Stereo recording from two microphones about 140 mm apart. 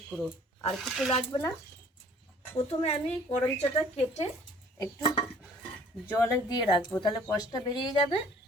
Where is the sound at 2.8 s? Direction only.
50° left (ahead or behind).